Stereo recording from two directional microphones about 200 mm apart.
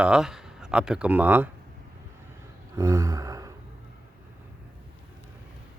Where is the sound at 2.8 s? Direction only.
15° right (ahead or behind).